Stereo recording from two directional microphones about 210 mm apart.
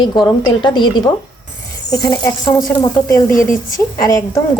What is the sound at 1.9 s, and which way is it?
Speech, 15° left (ahead or behind).